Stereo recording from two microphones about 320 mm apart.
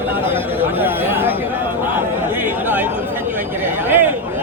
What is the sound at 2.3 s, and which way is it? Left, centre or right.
Chatter, centre.